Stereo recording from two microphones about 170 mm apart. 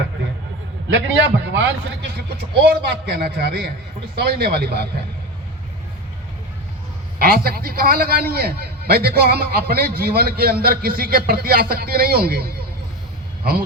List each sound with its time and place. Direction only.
0.9 s a man's voice: 90° right
1.9 s a man's voice: 75° right (ahead or behind)
7.2 s a man's voice: 65° right (ahead or behind)